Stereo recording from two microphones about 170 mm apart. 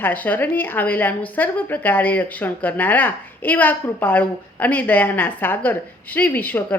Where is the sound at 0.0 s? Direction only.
10° left (ahead or behind).